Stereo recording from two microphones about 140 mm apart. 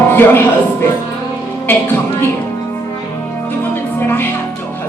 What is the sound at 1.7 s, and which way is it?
Speech, 15° left (ahead or behind).